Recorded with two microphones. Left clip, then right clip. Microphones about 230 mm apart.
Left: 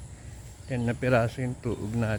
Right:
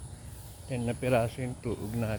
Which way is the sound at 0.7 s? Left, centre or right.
Centre.